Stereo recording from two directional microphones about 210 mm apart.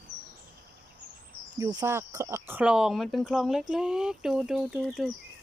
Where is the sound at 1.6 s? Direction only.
15° right (ahead or behind); by 5.1 s centre (ahead or behind).